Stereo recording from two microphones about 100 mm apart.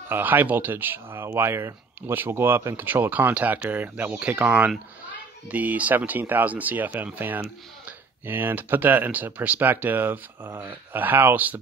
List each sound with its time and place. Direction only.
0.1 s speech: 20° right (ahead or behind)